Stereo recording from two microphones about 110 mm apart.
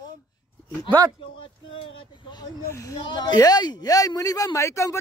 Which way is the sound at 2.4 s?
30° left (ahead or behind).